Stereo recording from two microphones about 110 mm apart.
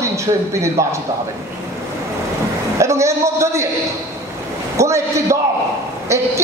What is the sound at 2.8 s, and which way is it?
Speech, 25° right (ahead or behind).